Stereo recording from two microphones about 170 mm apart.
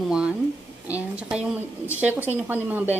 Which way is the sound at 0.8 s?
10° right (ahead or behind).